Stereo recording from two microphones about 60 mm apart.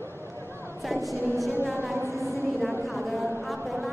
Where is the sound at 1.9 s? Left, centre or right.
Right.